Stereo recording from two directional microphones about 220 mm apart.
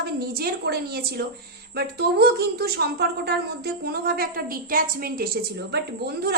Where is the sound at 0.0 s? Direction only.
45° right (ahead or behind).